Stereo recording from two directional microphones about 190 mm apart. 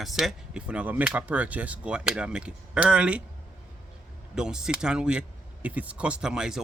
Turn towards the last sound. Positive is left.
turn(degrees=-5)  # may be behind; listen again after turning